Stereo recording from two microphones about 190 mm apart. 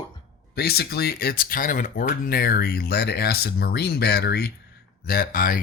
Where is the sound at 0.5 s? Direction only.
55° left (ahead or behind).